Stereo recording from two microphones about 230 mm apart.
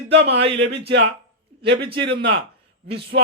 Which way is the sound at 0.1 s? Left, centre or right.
Right.